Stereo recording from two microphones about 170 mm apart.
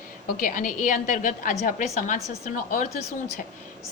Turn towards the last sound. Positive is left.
turn(degrees=40)  # may be behind; listen again after turning